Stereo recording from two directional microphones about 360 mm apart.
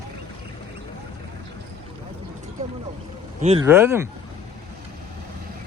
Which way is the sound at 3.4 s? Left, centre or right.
Centre.